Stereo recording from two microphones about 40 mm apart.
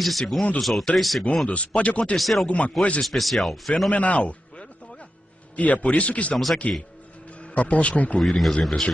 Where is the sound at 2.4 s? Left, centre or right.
Left.